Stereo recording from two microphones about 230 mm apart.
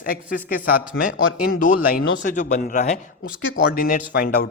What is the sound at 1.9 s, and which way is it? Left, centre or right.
A man's voice, left.